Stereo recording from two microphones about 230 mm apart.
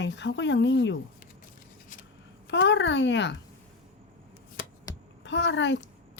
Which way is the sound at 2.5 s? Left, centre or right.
Left.